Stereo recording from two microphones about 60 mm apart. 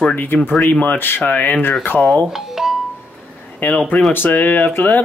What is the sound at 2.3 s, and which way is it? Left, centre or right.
Doorbell, centre.